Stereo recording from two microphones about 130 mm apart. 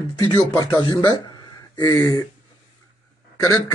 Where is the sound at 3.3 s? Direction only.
25° left (ahead or behind).